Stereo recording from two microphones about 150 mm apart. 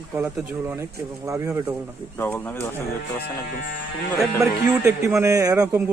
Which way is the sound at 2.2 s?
10° left (ahead or behind).